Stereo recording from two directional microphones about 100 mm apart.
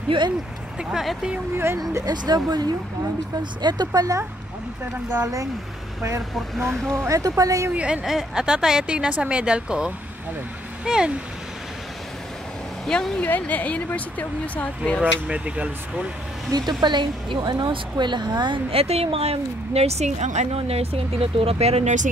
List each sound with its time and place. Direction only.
0.9 s speech: 5° right (ahead or behind)
2.0 s speech: 40° right (ahead or behind)
5.2 s speech: 35° right (ahead or behind)
7.7 s speech: 10° right (ahead or behind)
12.8 s speech: 5° left (ahead or behind)
13.2 s speech: 15° left (ahead or behind)
15.2 s speech: 10° right (ahead or behind)
16.4 s speech: 45° right (ahead or behind)
18.7 s speech: 85° right